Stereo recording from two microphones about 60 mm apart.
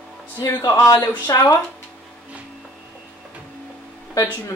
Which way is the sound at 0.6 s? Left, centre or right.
Left.